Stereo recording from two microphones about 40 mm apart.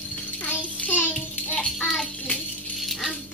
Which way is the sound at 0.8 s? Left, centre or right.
Left.